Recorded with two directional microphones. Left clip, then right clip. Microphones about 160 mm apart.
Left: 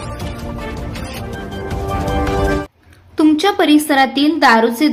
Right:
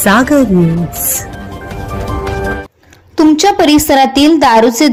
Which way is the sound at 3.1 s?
35° right (ahead or behind).